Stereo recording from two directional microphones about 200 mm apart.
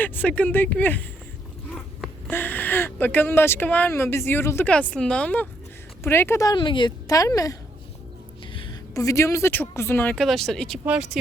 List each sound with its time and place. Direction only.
0.0 s speech: 10° left (ahead or behind)
8.5 s speech: 20° left (ahead or behind); by 11.2 s 5° right (ahead or behind)